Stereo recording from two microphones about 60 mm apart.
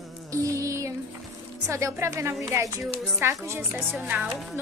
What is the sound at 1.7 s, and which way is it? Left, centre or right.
Speech, right.